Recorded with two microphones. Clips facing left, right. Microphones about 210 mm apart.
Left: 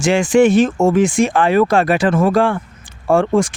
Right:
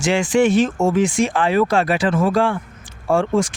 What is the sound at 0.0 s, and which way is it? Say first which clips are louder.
Speech: left 4 dB; 45° left (ahead or behind).